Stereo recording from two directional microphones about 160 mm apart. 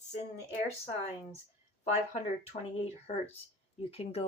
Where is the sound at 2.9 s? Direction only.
40° left (ahead or behind).